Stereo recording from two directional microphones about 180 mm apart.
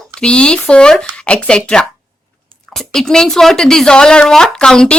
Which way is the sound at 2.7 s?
Centre (ahead or behind).